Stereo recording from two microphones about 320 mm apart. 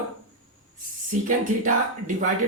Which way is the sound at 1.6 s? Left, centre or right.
Right.